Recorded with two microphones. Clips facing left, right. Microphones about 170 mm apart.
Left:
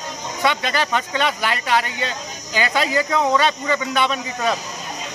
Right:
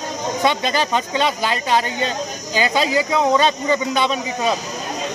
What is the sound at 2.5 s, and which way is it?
Speech, 15° right (ahead or behind).